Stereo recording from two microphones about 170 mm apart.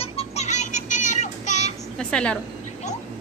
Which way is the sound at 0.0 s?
35° left (ahead or behind).